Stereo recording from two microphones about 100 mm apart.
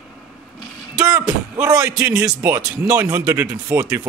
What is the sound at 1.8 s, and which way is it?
Speech, 15° right (ahead or behind).